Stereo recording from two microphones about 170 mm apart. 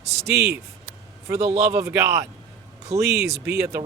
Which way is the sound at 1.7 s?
15° right (ahead or behind).